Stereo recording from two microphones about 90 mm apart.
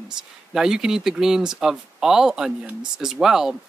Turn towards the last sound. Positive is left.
turn(degrees=-5)  # may be behind; listen again after turning